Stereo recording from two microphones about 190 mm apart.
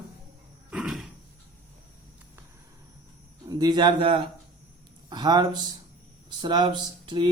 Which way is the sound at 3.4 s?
20° right (ahead or behind).